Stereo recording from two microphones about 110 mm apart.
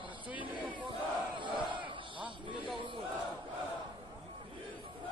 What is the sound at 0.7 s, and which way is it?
Battle cry, 45° right (ahead or behind).